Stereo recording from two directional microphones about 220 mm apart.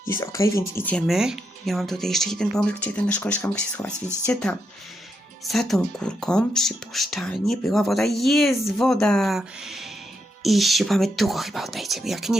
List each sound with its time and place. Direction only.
0.1 s speech: 15° left (ahead or behind)